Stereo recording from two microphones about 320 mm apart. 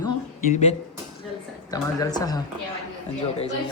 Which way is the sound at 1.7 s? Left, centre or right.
Centre.